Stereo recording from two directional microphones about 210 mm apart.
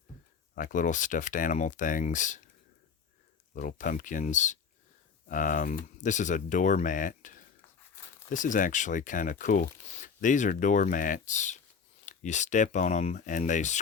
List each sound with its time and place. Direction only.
0.5 s speech: 40° left (ahead or behind)
3.5 s speech: 40° left (ahead or behind)